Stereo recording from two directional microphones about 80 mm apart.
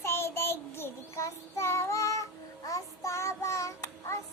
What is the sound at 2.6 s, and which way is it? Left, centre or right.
Child singing, left.